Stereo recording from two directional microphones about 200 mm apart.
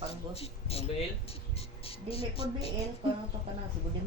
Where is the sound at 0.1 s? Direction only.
30° left (ahead or behind).